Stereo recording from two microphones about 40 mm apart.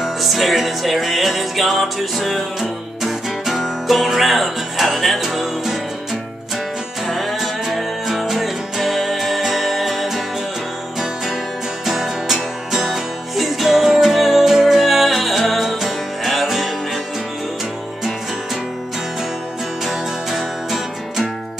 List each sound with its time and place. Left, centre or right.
0.0 s music: centre
7.1 s music: centre
11.8 s music: centre
19.9 s music: centre